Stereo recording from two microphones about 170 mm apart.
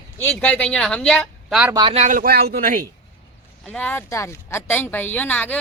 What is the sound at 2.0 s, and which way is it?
Speech, 50° right (ahead or behind).